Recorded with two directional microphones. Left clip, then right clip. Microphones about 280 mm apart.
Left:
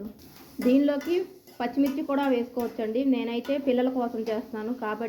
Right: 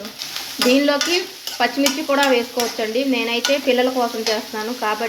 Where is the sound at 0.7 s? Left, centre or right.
Centre.